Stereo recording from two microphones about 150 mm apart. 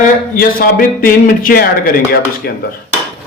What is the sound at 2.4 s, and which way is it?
Dishes, 90° left.